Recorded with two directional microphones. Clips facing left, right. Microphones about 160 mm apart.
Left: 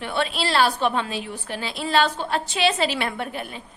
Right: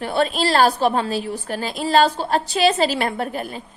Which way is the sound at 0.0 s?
40° right (ahead or behind).